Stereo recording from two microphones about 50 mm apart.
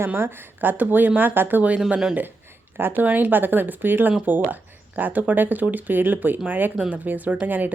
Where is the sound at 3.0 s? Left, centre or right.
Right.